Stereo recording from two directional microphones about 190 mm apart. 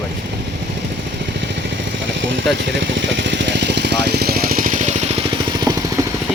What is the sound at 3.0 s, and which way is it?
Vehicle, 65° right (ahead or behind).